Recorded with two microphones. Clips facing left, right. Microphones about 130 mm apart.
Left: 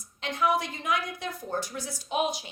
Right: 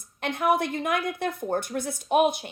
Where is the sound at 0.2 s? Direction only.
55° right (ahead or behind).